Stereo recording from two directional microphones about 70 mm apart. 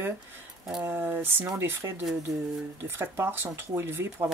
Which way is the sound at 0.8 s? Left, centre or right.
Right.